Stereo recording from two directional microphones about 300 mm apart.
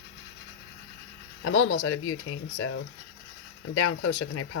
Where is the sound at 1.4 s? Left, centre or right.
Left.